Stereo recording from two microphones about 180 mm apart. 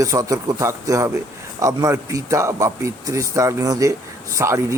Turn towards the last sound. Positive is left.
turn(degrees=-15)  # may be behind; listen again after turning